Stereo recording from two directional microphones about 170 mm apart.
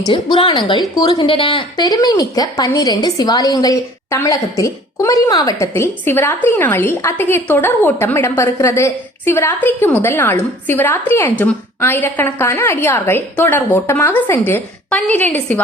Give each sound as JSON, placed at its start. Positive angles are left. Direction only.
{"t": 0.0, "sound": "a woman's voice", "side_deg": 30}